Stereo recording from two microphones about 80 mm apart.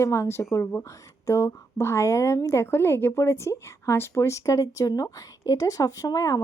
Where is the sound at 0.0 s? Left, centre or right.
Left.